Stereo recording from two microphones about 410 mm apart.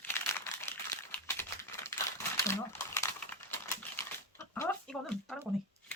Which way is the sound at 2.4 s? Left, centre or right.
Centre.